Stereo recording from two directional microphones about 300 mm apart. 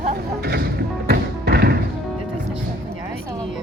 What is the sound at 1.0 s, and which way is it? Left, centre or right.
Music, right.